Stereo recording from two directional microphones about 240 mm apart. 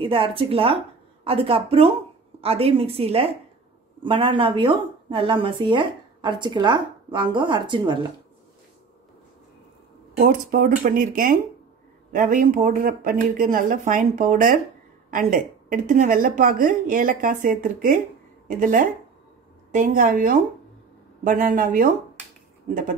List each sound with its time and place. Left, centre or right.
0.0 s a woman's voice: right
10.2 s a woman's voice: right